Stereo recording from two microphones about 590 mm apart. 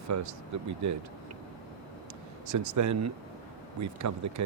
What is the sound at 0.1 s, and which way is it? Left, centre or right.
Speech, right.